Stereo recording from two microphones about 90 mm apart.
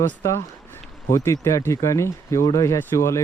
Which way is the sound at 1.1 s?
35° left (ahead or behind).